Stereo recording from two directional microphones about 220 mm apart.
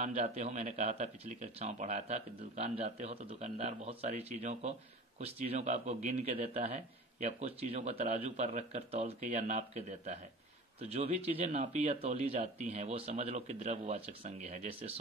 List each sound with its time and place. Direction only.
0.0 s speech: 30° right (ahead or behind)